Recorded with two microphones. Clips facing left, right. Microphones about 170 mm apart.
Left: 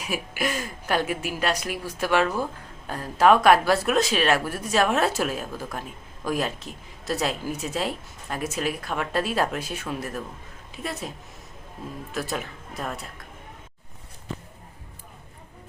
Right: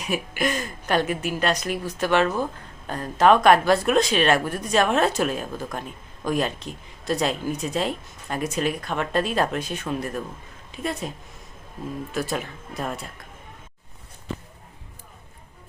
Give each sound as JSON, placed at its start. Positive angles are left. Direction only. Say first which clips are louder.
{"t": 0.0, "sound": "a woman's voice", "louder": "right 3 dB", "side_deg": 5}
{"t": 12.1, "sound": "a woman's voice", "louder": "right 1 dB", "side_deg": 0}